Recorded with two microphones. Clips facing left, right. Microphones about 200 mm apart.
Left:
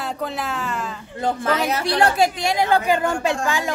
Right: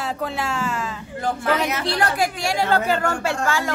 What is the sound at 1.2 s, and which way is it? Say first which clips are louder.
A woman's voice: left 1 dB; 30° left (ahead or behind).